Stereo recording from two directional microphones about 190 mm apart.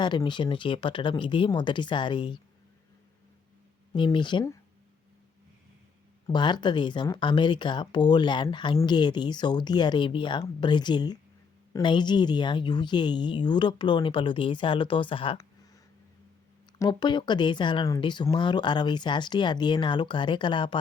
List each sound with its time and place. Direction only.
0.0 s speech: 25° left (ahead or behind)
3.9 s speech: 25° left (ahead or behind)
6.2 s speech: 25° left (ahead or behind)
16.7 s speech: 20° left (ahead or behind)